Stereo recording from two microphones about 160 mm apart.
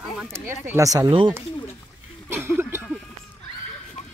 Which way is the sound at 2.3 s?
15° right (ahead or behind).